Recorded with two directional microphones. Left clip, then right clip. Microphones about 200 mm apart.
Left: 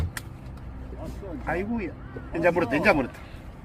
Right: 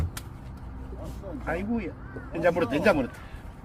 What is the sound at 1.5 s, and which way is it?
A man's voice, 45° right (ahead or behind).